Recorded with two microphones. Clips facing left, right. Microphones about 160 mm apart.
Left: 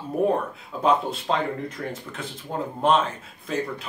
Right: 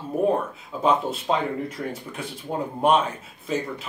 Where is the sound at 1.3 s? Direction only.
10° right (ahead or behind).